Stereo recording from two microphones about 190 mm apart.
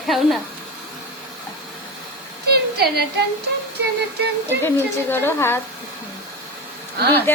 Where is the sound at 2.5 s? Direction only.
55° right (ahead or behind).